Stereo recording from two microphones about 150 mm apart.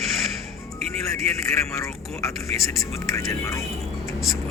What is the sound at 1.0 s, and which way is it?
Speech, 20° left (ahead or behind).